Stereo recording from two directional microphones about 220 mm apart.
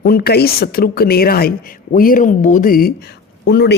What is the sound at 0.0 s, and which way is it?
Speech, 45° left (ahead or behind).